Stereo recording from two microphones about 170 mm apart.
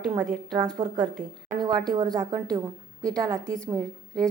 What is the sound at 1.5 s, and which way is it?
Speech, 50° right (ahead or behind).